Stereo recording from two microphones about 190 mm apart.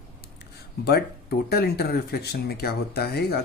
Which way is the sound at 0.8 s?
55° left (ahead or behind).